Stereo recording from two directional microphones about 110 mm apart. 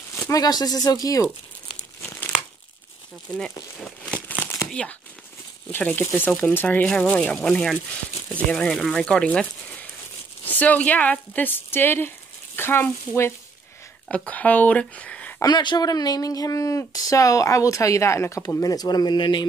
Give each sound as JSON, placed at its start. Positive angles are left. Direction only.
{"t": 0.3, "sound": "speech", "side_deg": 35}
{"t": 2.0, "sound": "crumpling", "side_deg": 15}
{"t": 3.8, "sound": "crumpling", "side_deg": 10}
{"t": 4.6, "sound": "speech", "side_deg": 10}
{"t": 15.4, "sound": "speech", "side_deg": 40}